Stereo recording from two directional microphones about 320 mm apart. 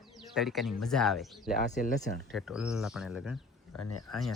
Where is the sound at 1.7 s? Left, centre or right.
Left.